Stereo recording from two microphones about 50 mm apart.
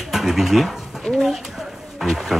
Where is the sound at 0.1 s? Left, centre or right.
Centre.